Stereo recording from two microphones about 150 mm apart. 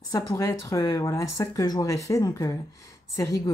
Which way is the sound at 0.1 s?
20° left (ahead or behind).